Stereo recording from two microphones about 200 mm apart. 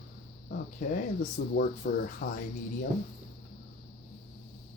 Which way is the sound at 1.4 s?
55° left (ahead or behind).